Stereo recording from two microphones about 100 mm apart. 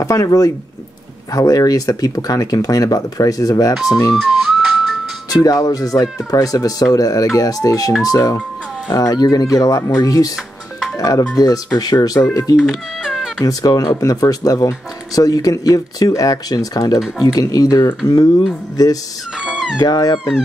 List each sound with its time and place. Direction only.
0.0 s speech: 35° left (ahead or behind)
4.1 s whistling: 5° right (ahead or behind)
5.3 s speech: 35° left (ahead or behind)
10.3 s music: centre (ahead or behind)
11.0 s speech: 35° left (ahead or behind)
12.6 s music: 5° right (ahead or behind)
13.4 s speech: 40° left (ahead or behind)
19.3 s speech: 10° right (ahead or behind)
19.8 s speech: 40° left (ahead or behind)